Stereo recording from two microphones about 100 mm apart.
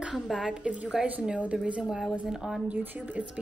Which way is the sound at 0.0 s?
Centre (ahead or behind).